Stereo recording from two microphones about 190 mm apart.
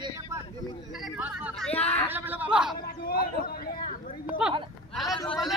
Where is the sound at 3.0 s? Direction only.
50° left (ahead or behind).